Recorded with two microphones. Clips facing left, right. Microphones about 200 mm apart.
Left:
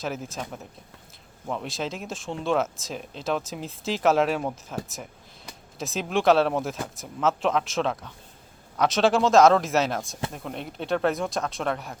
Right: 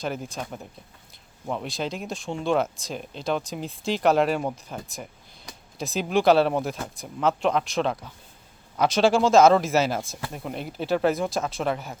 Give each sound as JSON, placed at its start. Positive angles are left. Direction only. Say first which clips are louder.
{"t": 0.0, "sound": "speech", "louder": "right 1 dB", "side_deg": 0}